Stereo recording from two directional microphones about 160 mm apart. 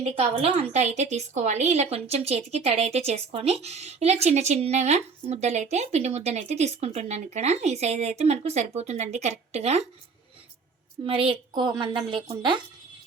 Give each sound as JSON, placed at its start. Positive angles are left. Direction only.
{"t": 0.0, "sound": "a woman's voice", "side_deg": -40}
{"t": 11.0, "sound": "a woman's voice", "side_deg": -35}